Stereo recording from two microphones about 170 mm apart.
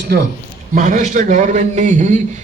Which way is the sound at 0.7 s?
50° right (ahead or behind).